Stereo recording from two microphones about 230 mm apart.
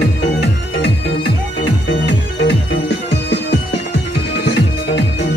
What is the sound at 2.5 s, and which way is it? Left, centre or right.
Music, left.